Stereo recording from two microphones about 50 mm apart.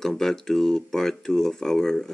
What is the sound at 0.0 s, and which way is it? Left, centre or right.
Speech, centre.